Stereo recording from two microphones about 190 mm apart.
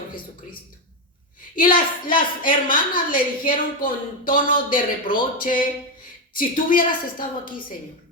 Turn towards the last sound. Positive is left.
turn(degrees=45)  # may be behind; listen again after turning